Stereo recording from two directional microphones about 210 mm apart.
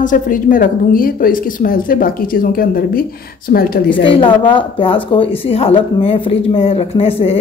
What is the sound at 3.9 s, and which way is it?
A woman's voice, 25° left (ahead or behind).